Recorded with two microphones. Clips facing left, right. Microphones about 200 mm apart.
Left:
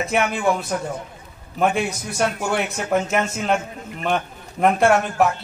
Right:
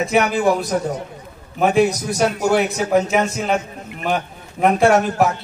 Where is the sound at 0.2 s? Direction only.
40° right (ahead or behind).